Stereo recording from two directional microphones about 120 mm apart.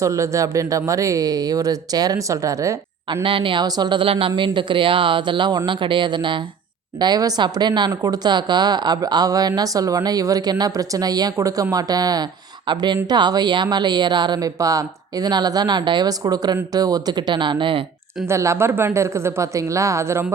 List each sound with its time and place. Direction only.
0.0 s speech: 25° right (ahead or behind)
3.2 s speech: 45° right (ahead or behind)
18.3 s speech: 25° right (ahead or behind)